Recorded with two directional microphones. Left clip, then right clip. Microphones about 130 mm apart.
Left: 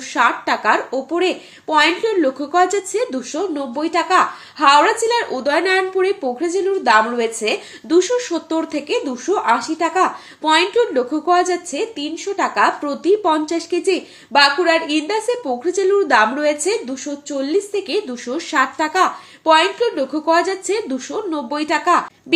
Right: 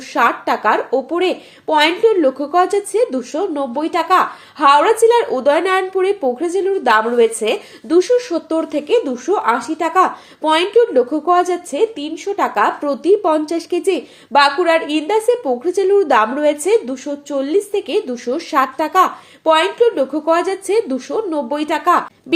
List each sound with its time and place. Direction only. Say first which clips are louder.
0.1 s speech: right 1 dB; 35° right (ahead or behind)
7.9 s speech: right 3 dB; 30° right (ahead or behind)